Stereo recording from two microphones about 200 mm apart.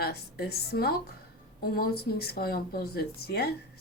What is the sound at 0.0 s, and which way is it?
Speech, 50° left (ahead or behind).